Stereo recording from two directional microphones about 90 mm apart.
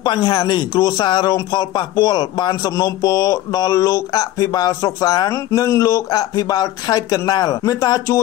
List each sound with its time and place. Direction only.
0.0 s speech: 50° left (ahead or behind)
5.3 s speech: 35° left (ahead or behind)